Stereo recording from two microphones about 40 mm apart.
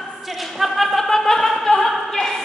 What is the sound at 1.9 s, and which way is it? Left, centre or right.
Opera, centre.